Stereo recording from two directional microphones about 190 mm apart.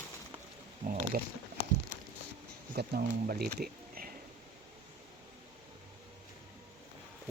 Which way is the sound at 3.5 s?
50° right (ahead or behind).